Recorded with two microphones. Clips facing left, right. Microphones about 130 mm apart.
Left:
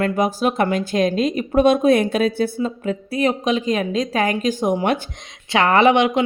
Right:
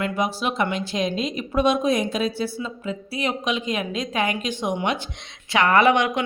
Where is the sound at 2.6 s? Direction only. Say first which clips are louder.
Left 7 dB; 45° left (ahead or behind).